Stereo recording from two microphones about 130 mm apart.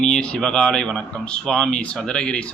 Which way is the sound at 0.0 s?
5° left (ahead or behind).